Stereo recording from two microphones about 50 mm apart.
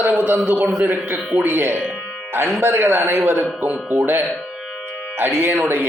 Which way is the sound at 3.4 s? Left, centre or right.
Right.